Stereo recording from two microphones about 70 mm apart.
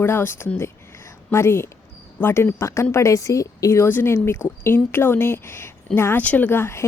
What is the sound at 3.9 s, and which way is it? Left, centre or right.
A woman's voice, left.